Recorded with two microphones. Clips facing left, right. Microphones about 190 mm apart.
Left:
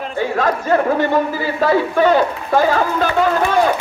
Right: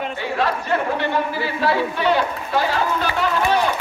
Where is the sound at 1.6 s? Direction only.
45° left (ahead or behind).